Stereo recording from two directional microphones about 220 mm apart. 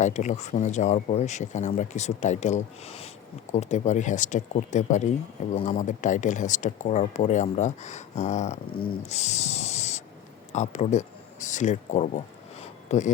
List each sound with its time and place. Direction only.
0.0 s speech: 35° left (ahead or behind)